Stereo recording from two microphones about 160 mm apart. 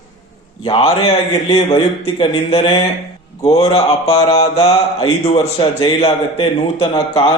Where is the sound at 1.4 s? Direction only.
30° left (ahead or behind).